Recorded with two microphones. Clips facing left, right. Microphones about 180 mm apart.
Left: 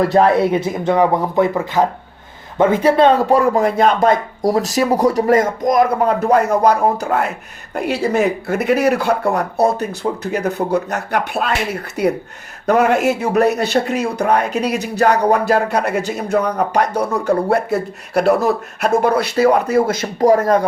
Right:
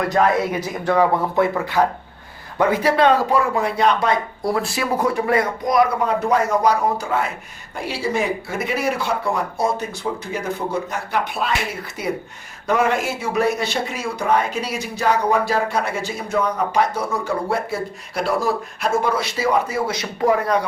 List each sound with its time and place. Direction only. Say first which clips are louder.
0.0 s speech: left 5 dB; 30° left (ahead or behind)
3.2 s speech: left 6 dB; 40° left (ahead or behind)